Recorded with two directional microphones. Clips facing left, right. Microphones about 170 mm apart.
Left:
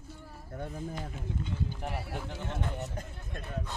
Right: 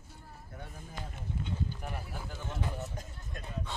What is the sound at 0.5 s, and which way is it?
Speech, 45° left (ahead or behind).